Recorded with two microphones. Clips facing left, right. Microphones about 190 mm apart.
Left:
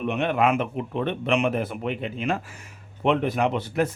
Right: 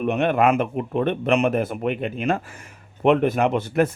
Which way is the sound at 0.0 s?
50° right (ahead or behind).